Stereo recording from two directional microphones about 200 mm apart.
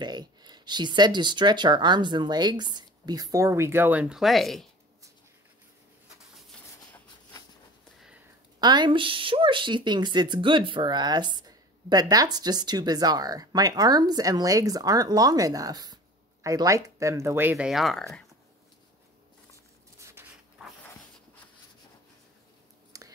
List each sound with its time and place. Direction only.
0.0 s speech: 20° right (ahead or behind); by 4.6 s centre (ahead or behind)
8.5 s speech: 20° right (ahead or behind); by 18.0 s centre (ahead or behind)
20.1 s a sound: 10° right (ahead or behind)
22.9 s whispering: 15° right (ahead or behind)